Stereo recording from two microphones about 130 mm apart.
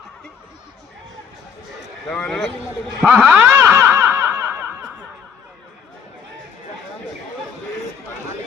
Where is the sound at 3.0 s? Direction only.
15° right (ahead or behind).